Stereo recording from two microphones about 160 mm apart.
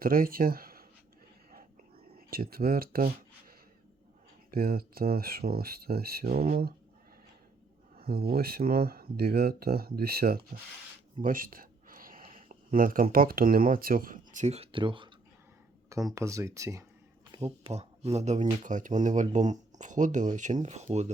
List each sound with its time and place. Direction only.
0.0 s speech: 65° right (ahead or behind)
2.1 s speech: 65° right (ahead or behind)
4.5 s speech: 65° right (ahead or behind)
7.9 s speech: 70° right (ahead or behind)
11.2 s speech: 60° right (ahead or behind); by 15.1 s 30° right (ahead or behind)
16.1 s speech: 20° right (ahead or behind)
17.3 s speech: 40° right (ahead or behind)